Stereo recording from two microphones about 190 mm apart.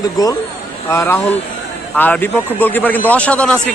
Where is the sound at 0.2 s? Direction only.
20° left (ahead or behind).